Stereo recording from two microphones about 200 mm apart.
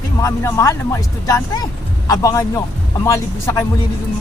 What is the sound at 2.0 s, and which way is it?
Speech, 15° left (ahead or behind).